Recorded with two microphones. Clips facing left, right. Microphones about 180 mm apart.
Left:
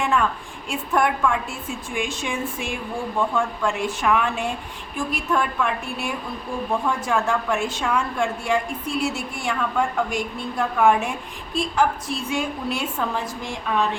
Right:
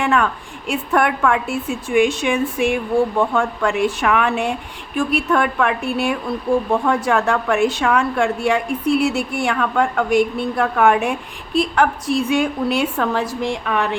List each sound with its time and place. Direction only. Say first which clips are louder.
0.0 s a woman's voice: right 4 dB; 70° right (ahead or behind)